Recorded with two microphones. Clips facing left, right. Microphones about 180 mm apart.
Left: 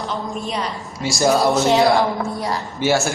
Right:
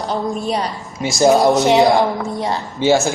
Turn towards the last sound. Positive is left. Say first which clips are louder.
# right 4 dB
turn(degrees=-20)  # may be behind; listen again after turning